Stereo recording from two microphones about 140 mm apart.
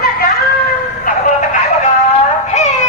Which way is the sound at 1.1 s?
90° left.